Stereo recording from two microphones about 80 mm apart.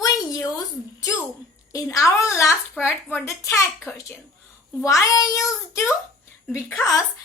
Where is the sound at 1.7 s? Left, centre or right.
Left.